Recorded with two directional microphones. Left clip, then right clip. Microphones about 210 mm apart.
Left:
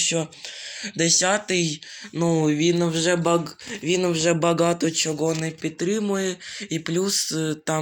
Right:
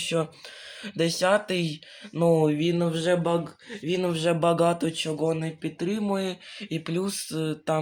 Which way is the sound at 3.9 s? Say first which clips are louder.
Left 4 dB; 5° left (ahead or behind).